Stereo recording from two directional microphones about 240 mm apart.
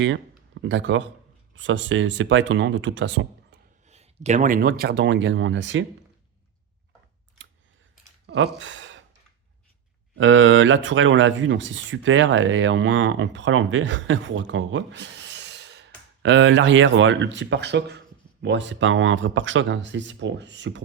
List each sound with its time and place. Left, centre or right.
0.6 s speech: right
3.5 s a sound: right
3.8 s a man's voice: right
8.3 s speech: right
10.2 s speech: right